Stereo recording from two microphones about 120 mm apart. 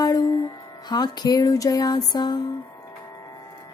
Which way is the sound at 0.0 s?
35° left (ahead or behind).